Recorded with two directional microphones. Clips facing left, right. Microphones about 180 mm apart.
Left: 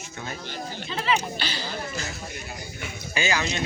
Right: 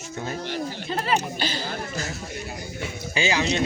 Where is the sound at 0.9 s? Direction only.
45° right (ahead or behind).